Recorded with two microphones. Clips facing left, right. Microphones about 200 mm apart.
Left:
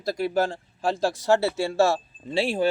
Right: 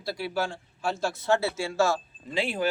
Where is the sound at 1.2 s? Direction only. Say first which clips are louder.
Left 3 dB; 65° left (ahead or behind).